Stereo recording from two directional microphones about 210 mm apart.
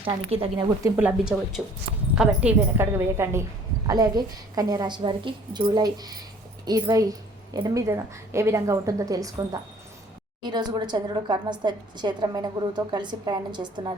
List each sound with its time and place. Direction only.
0.0 s a woman's voice: 25° right (ahead or behind)
0.9 s a woman's voice: 5° right (ahead or behind); by 13.9 s 20° right (ahead or behind)